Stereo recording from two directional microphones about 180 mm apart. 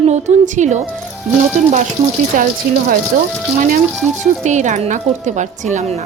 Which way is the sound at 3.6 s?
50° right (ahead or behind).